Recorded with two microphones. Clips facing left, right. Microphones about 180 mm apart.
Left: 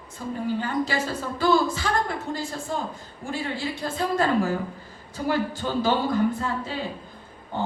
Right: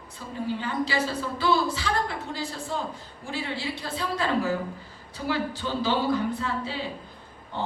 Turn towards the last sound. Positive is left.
turn(degrees=45)  # may be behind; listen again after turning